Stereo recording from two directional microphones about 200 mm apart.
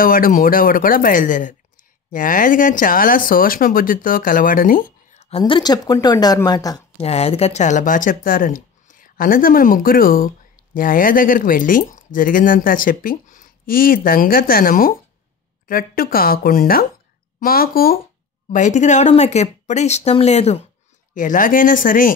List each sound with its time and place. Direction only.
0.0 s speech: 45° left (ahead or behind)
5.4 s a woman's voice: 20° left (ahead or behind)
7.0 s speech: 30° left (ahead or behind)